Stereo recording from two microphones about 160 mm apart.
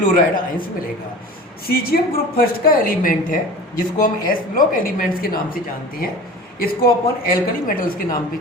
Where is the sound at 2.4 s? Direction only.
65° left (ahead or behind).